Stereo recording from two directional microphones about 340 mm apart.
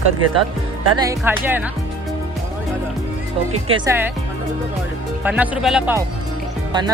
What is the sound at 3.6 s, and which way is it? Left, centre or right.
Speech, centre.